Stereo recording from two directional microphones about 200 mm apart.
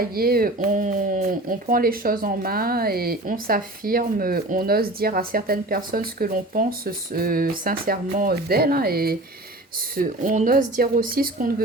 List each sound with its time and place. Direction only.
0.0 s speech: 50° right (ahead or behind)